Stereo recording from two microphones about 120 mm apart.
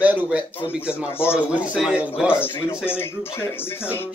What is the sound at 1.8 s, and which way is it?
Speech, 5° right (ahead or behind).